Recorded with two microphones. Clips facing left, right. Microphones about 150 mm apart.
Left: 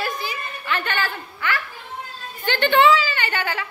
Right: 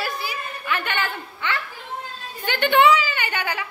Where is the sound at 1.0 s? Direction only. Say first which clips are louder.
Left 1 dB; 25° right (ahead or behind).